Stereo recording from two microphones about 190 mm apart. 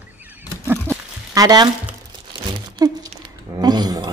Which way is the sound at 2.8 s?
20° right (ahead or behind).